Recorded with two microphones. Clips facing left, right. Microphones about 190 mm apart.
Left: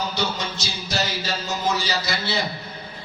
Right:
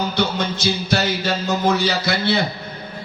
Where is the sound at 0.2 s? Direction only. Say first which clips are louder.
Right 6 dB; 60° right (ahead or behind).